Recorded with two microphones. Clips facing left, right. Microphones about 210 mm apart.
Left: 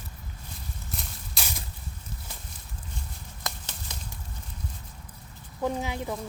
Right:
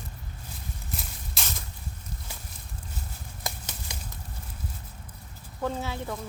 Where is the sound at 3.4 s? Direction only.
10° right (ahead or behind).